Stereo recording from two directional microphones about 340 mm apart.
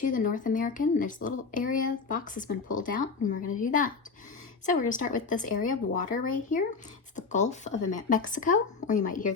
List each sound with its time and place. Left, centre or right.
0.0 s speech: left